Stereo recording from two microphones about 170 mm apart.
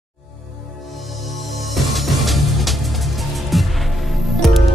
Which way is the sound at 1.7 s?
Centre (ahead or behind).